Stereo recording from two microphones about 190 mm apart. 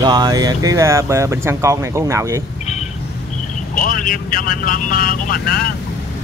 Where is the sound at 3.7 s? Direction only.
50° left (ahead or behind).